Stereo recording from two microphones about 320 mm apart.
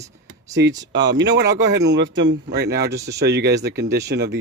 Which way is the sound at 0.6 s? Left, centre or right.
Right.